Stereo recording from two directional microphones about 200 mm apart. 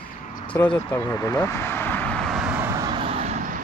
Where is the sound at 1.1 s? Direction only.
15° left (ahead or behind); by 2.9 s 10° right (ahead or behind).